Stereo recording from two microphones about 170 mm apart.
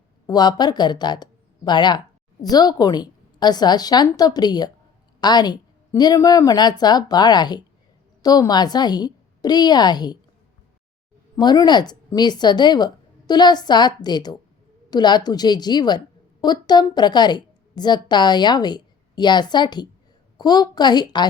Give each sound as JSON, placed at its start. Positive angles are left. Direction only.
{"t": 0.3, "sound": "a woman's voice", "side_deg": 25}
{"t": 11.3, "sound": "a woman's voice", "side_deg": 25}